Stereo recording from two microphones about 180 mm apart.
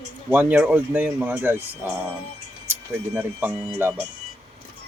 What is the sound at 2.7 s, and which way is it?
Speech, 10° right (ahead or behind).